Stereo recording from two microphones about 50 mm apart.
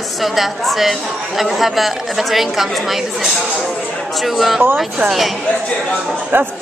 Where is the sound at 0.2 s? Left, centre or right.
Centre.